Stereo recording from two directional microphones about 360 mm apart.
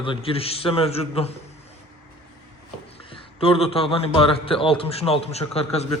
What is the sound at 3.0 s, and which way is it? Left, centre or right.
A man's voice, centre.